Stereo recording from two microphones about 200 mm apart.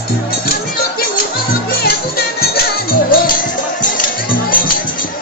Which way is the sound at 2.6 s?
45° left (ahead or behind).